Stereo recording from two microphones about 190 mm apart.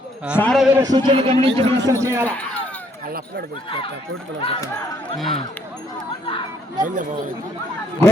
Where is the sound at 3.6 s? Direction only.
25° left (ahead or behind).